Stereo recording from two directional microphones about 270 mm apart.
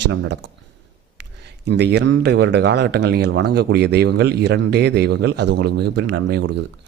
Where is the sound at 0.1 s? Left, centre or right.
Right.